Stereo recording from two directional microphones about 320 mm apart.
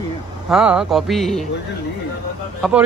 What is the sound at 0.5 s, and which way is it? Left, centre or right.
Speech, centre.